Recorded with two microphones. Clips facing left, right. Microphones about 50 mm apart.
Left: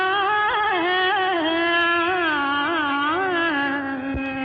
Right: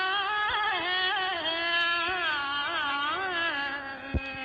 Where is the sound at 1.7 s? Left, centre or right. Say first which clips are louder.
Left 8 dB; centre.